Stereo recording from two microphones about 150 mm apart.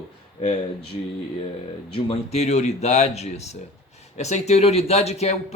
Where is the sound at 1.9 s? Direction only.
40° left (ahead or behind).